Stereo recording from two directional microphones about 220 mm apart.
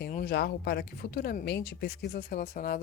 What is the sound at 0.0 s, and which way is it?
Speech, 45° left (ahead or behind).